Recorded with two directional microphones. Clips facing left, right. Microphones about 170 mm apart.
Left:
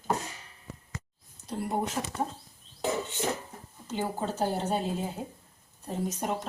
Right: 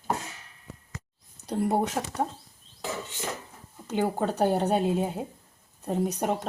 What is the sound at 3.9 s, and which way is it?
A woman's voice, 60° right (ahead or behind).